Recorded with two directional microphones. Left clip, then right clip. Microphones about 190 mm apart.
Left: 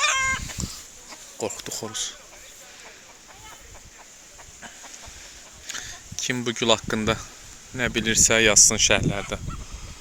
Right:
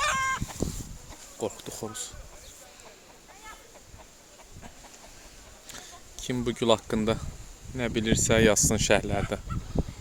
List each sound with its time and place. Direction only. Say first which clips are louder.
0.0 s chicken: left 4 dB; 25° right (ahead or behind)
1.4 s speech: left 3 dB; 5° right (ahead or behind)
5.6 s speech: left 10 dB; 5° right (ahead or behind); by 9.4 s 25° right (ahead or behind)